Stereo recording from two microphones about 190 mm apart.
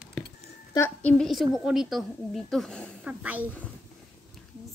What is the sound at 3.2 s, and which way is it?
Speech, 10° right (ahead or behind).